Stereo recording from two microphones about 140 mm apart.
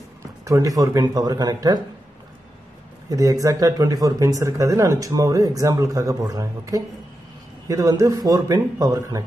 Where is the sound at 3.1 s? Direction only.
25° right (ahead or behind).